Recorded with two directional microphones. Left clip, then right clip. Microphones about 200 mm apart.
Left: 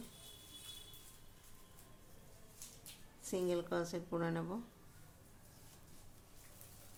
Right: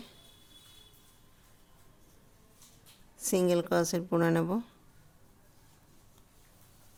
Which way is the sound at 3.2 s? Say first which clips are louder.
Right 11 dB; 55° right (ahead or behind).